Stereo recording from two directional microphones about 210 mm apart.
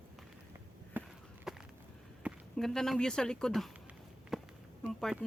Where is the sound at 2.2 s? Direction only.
Centre (ahead or behind).